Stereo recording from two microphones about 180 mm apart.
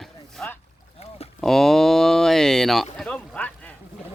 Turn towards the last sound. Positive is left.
turn(degrees=5)  # may be behind; listen again after turning